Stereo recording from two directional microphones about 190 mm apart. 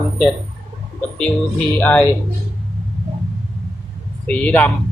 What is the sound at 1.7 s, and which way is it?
Speech, 10° left (ahead or behind).